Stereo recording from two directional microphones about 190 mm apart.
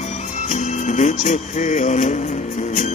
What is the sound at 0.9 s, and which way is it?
Music, 35° left (ahead or behind).